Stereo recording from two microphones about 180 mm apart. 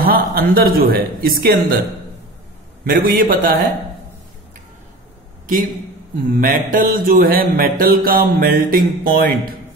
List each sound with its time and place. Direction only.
0.0 s speech: 55° right (ahead or behind)
2.8 s speech: 55° right (ahead or behind)
6.2 s music: 50° right (ahead or behind)